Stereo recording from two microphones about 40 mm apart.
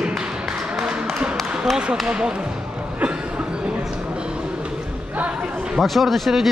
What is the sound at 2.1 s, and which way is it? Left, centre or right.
Speech, right.